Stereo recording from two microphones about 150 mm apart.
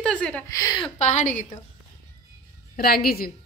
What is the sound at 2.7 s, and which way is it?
Speech, 85° left.